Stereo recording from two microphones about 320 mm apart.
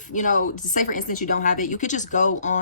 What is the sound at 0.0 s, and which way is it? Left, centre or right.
Speech, left.